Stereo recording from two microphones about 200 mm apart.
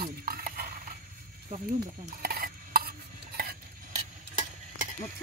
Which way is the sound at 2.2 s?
50° right (ahead or behind).